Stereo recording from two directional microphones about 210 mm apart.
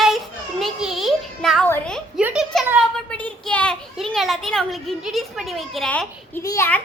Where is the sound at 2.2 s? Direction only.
5° right (ahead or behind).